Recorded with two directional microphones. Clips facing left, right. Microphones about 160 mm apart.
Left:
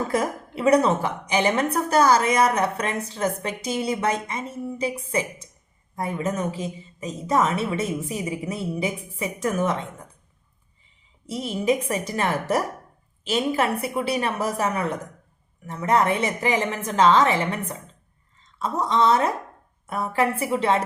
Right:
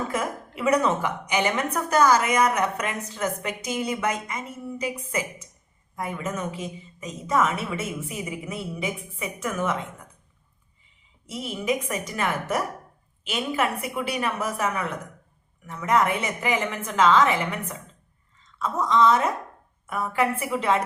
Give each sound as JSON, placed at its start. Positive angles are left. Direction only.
{"t": 0.1, "sound": "a woman's voice", "side_deg": 35}
{"t": 6.0, "sound": "a woman's voice", "side_deg": 35}
{"t": 11.3, "sound": "a woman's voice", "side_deg": 35}